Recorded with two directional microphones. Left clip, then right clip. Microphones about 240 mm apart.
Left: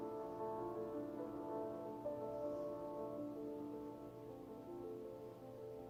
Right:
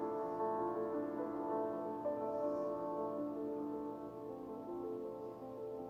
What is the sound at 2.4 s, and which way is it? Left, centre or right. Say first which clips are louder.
Singing bowl: right 6 dB; right.